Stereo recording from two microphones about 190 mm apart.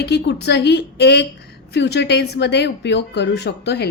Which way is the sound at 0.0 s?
60° left (ahead or behind).